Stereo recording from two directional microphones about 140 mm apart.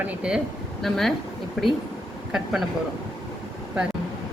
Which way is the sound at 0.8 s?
Centre (ahead or behind).